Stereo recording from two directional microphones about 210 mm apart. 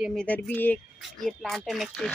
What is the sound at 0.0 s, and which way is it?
Speech, 5° left (ahead or behind).